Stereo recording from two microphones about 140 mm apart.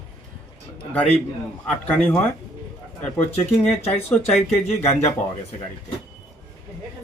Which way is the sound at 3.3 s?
50° left (ahead or behind).